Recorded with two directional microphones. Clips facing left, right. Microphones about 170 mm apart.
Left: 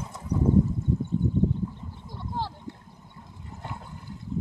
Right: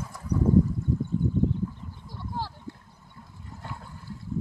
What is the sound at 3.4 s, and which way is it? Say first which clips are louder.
Toilet flush: left 2 dB; 20° left (ahead or behind).